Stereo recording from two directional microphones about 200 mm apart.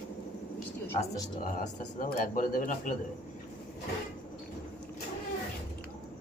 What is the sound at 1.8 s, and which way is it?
Speech, 45° left (ahead or behind).